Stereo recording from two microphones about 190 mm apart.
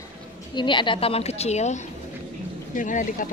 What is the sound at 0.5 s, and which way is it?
A woman's voice, 25° left (ahead or behind).